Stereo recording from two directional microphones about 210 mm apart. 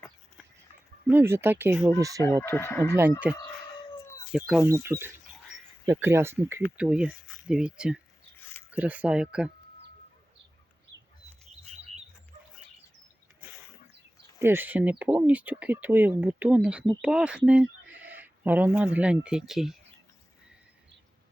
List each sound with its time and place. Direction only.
1.0 s speech: 10° right (ahead or behind)
2.4 s speech: 10° left (ahead or behind)
3.2 s speech: 5° right (ahead or behind)
14.3 s speech: 10° right (ahead or behind)